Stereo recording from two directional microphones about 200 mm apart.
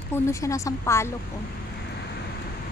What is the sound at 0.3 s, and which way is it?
Speech, 15° left (ahead or behind).